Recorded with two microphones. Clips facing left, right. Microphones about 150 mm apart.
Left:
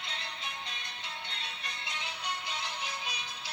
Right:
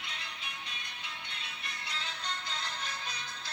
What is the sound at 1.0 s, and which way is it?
Music, 30° left (ahead or behind).